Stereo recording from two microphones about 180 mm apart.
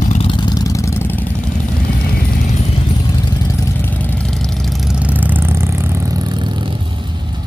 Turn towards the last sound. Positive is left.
turn(degrees=-25)  # may be behind; listen again after turning